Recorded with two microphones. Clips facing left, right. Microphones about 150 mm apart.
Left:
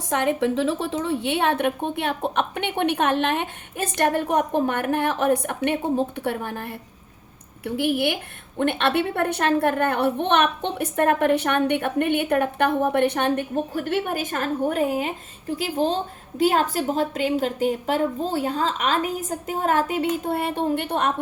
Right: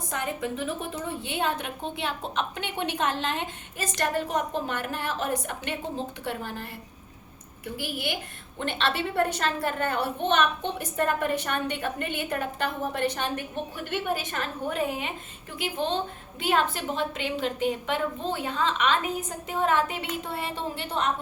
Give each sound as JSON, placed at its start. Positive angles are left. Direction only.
{"t": 0.1, "sound": "a woman's voice", "side_deg": 80}
{"t": 13.7, "sound": "a woman's voice", "side_deg": 50}